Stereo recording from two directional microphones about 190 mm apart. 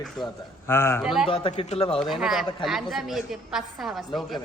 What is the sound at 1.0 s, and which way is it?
Speech, 5° right (ahead or behind).